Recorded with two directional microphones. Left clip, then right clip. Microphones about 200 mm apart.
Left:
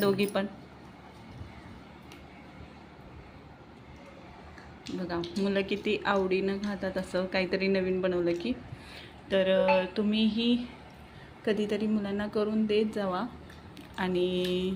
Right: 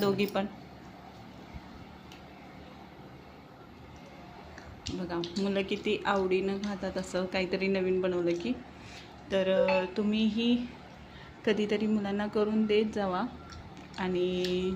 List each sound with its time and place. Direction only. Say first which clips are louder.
0.0 s a woman's voice: left 2 dB; centre (ahead or behind)
5.4 s a woman's voice: left 2 dB; 5° left (ahead or behind)
13.9 s a sound: left 2 dB; 10° left (ahead or behind)